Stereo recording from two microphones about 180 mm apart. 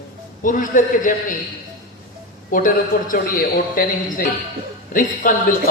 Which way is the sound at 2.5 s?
50° left (ahead or behind).